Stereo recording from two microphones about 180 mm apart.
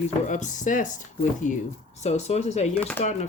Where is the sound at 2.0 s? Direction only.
40° left (ahead or behind).